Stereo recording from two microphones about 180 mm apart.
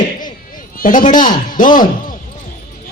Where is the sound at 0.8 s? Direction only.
50° left (ahead or behind).